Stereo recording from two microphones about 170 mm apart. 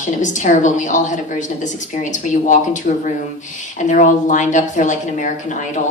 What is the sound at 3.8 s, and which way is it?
A woman's voice, 50° left (ahead or behind).